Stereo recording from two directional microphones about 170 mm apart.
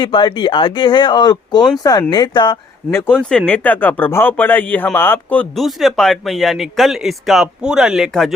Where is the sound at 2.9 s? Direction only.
15° left (ahead or behind).